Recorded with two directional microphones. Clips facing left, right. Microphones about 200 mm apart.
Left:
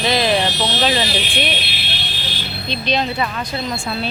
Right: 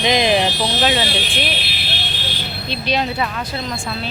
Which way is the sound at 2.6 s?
10° right (ahead or behind).